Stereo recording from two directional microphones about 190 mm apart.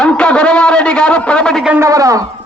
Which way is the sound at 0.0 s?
5° left (ahead or behind).